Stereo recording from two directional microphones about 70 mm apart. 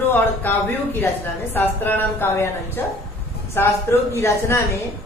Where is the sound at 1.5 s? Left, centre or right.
Left.